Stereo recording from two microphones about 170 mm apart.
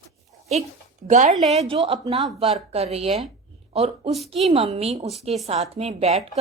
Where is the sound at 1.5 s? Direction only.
30° right (ahead or behind).